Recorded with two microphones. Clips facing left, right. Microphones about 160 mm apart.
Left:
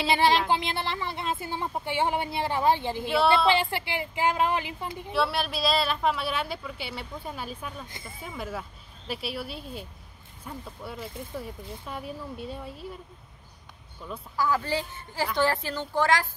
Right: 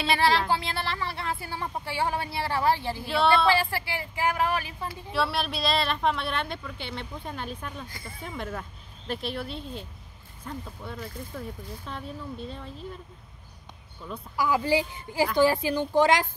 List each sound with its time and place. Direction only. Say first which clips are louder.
0.0 s speech: left 1 dB; 20° left (ahead or behind)
5.1 s speech: left 1 dB; centre (ahead or behind)
7.9 s speech: right 1 dB; 20° left (ahead or behind)
8.2 s speech: even; 5° left (ahead or behind)
14.3 s a woman's voice: right 3 dB; 15° right (ahead or behind)